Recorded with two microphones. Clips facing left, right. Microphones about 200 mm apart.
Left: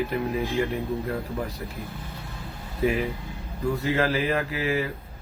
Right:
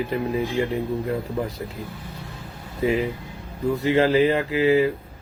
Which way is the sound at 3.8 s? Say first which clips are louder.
Right 8 dB; 25° right (ahead or behind).